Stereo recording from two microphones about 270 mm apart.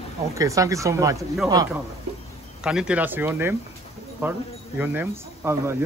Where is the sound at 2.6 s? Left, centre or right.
Centre.